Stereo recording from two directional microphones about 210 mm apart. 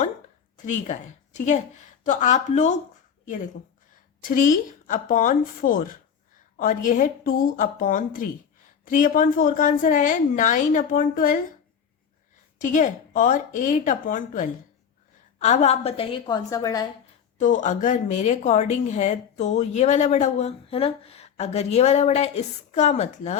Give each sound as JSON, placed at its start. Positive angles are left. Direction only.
{"t": 0.5, "sound": "a woman's voice", "side_deg": 35}
{"t": 4.2, "sound": "speech", "side_deg": 40}
{"t": 12.6, "sound": "a woman's voice", "side_deg": 40}
{"t": 17.3, "sound": "speech", "side_deg": 35}